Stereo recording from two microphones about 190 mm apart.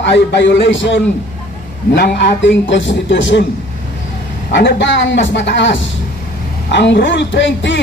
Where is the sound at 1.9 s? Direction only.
60° left (ahead or behind); by 3.4 s 75° left (ahead or behind).